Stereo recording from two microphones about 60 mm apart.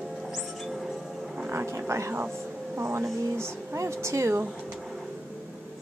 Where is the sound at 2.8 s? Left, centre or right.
Right.